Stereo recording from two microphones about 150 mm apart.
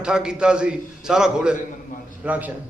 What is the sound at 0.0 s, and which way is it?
A man's voice, 5° right (ahead or behind).